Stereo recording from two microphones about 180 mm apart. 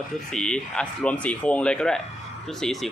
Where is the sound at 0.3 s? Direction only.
5° left (ahead or behind).